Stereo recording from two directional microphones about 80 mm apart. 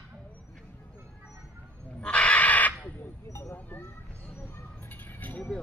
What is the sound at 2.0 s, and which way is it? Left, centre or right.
Crow, centre.